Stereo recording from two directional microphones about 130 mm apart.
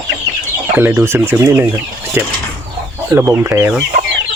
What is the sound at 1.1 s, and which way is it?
Speech, 10° right (ahead or behind).